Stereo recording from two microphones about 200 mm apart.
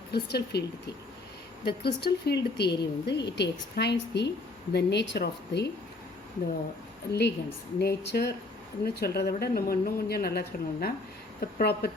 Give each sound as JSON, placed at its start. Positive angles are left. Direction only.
{"t": 0.1, "sound": "a woman's voice", "side_deg": 55}
{"t": 1.6, "sound": "speech", "side_deg": 55}
{"t": 7.1, "sound": "a woman's voice", "side_deg": 55}